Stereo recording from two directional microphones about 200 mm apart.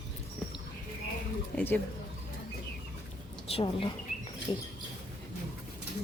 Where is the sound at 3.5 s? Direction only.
25° left (ahead or behind).